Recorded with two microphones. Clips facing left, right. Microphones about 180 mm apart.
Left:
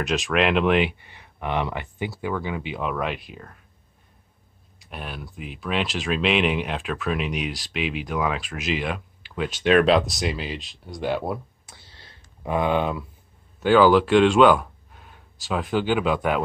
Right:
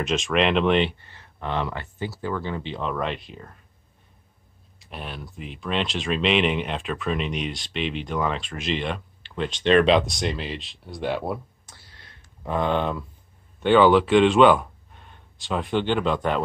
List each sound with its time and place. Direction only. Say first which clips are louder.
0.0 s speech: even; centre (ahead or behind)
4.7 s speech: even; centre (ahead or behind)
11.7 s a sound: left 2 dB; 25° left (ahead or behind)
12.4 s speech: left 1 dB; 10° left (ahead or behind)